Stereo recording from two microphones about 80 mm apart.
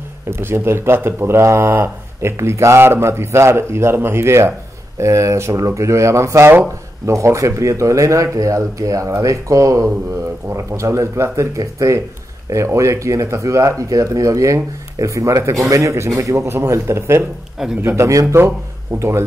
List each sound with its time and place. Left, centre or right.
0.3 s speech: right
2.3 s speech: right
18.2 s a man's voice: right